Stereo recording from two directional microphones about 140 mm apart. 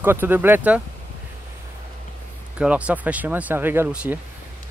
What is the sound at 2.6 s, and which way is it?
Speech, 10° right (ahead or behind).